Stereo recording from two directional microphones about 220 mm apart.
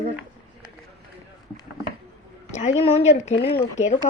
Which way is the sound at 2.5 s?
30° left (ahead or behind).